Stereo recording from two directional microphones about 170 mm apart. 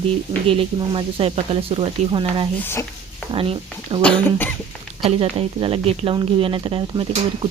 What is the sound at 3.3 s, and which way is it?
Speech, 35° right (ahead or behind).